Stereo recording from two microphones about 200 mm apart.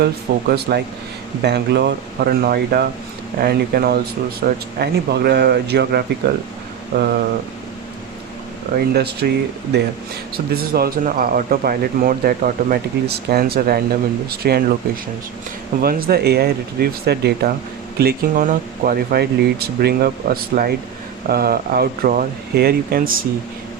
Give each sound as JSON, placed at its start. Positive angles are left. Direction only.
{"t": 0.0, "sound": "speech", "side_deg": -50}
{"t": 8.7, "sound": "speech", "side_deg": -50}
{"t": 15.8, "sound": "speech", "side_deg": -50}